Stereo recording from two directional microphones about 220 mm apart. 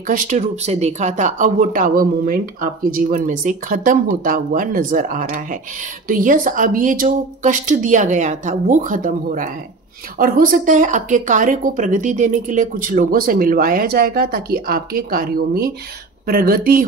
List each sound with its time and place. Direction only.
0.0 s speech: 35° right (ahead or behind)